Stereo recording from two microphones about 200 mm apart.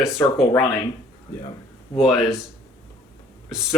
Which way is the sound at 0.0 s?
Centre (ahead or behind).